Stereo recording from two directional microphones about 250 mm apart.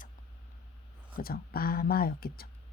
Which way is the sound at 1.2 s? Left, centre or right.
Left.